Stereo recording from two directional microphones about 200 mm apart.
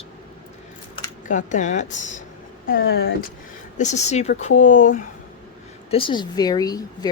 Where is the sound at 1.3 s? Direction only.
40° left (ahead or behind).